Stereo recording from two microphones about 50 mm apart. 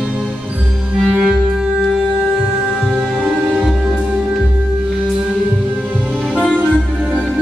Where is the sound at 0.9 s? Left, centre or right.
Centre.